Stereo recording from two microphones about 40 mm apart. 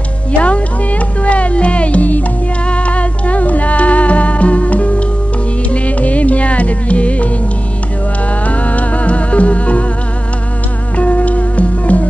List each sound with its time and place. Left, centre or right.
0.4 s speech: left
2.7 s music: left
8.5 s music: left
11.0 s music: left